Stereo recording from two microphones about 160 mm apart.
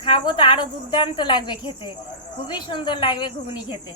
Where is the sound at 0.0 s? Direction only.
30° left (ahead or behind).